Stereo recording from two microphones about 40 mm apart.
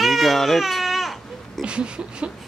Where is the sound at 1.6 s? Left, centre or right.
Right.